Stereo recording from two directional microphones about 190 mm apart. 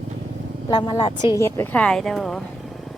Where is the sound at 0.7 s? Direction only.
25° left (ahead or behind); by 2.4 s centre (ahead or behind).